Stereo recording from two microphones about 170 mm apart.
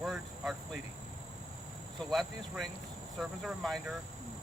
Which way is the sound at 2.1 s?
Centre (ahead or behind).